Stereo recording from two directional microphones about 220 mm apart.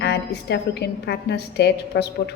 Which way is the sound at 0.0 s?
50° left (ahead or behind).